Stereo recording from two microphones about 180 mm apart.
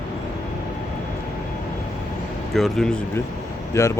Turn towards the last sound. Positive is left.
turn(degrees=15)  # may be behind; listen again after turning